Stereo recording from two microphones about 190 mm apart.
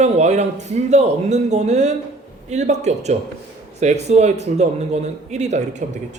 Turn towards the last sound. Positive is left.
turn(degrees=-35)  # may be behind; listen again after turning